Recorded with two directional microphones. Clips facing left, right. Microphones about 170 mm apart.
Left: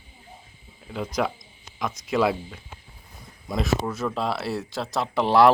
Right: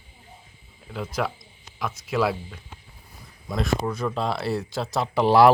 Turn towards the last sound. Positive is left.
turn(degrees=0)  # may be behind; listen again after turning